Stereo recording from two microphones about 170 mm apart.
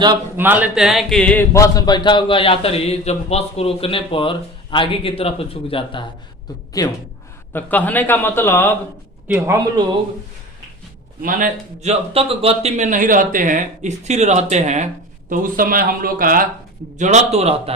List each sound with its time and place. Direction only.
0.3 s a man's voice: 10° right (ahead or behind); by 6.9 s 20° left (ahead or behind)
7.5 s speech: 10° left (ahead or behind)
9.2 s a man's voice: 10° right (ahead or behind)
11.2 s a man's voice: 55° right (ahead or behind)
15.3 s speech: 55° right (ahead or behind)
17.0 s a man's voice: 40° right (ahead or behind)